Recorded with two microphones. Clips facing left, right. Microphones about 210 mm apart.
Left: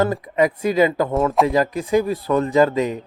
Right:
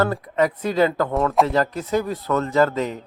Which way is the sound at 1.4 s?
10° left (ahead or behind).